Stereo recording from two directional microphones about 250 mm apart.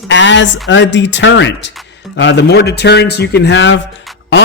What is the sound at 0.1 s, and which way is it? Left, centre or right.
Speech, left.